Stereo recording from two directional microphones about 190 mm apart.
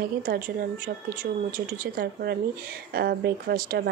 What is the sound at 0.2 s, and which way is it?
Speech, 45° right (ahead or behind).